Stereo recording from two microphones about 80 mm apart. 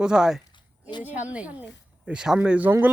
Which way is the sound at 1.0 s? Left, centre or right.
Right.